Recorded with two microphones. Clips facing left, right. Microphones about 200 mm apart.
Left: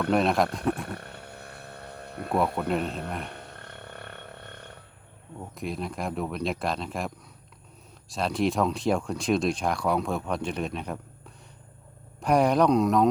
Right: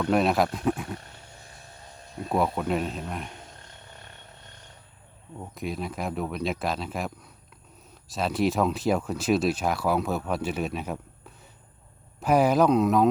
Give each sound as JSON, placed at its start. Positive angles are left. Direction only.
{"t": 0.1, "sound": "speech", "side_deg": -5}
{"t": 0.9, "sound": "vehicle", "side_deg": 60}
{"t": 2.6, "sound": "speech", "side_deg": 0}
{"t": 3.2, "sound": "roaring cats", "side_deg": 60}
{"t": 5.4, "sound": "speech", "side_deg": 0}
{"t": 8.1, "sound": "speech", "side_deg": -5}
{"t": 12.2, "sound": "speech", "side_deg": -5}